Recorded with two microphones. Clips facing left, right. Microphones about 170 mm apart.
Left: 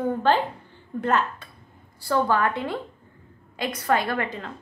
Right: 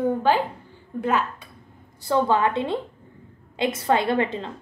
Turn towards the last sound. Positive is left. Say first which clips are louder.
# right 5 dB
turn(degrees=-25)  # may be behind; listen again after turning